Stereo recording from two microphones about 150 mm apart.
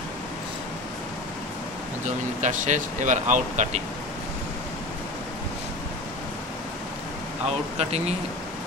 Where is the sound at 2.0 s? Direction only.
55° right (ahead or behind).